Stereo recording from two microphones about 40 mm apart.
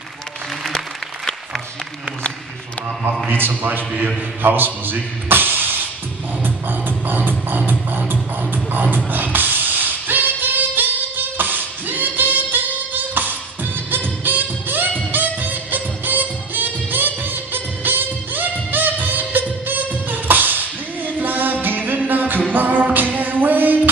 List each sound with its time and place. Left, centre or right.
3.3 s speech: right
6.4 s music: right
8.9 s vocal music: right
13.8 s music: right